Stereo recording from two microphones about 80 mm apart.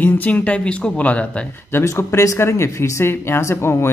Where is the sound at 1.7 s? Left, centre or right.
Left.